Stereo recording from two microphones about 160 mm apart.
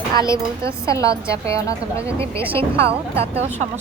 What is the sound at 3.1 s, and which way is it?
Speech, 40° right (ahead or behind).